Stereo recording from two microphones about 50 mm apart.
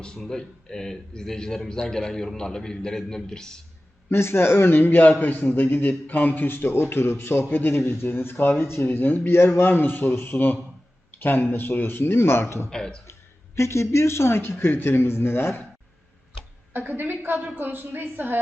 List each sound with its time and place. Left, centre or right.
0.2 s a man's voice: centre
4.1 s speech: left
12.7 s a man's voice: centre
13.6 s a man's voice: left
16.7 s a woman's voice: right